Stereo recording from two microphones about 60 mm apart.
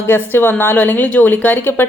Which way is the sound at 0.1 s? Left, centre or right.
Left.